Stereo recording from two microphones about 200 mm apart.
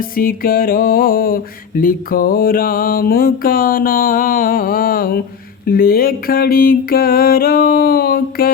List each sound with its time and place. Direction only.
0.0 s music: 45° left (ahead or behind)